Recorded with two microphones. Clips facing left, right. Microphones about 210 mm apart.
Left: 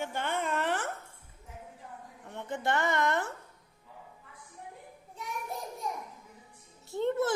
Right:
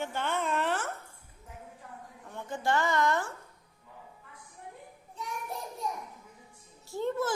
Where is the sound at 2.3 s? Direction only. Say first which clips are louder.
Right 1 dB; 20° left (ahead or behind).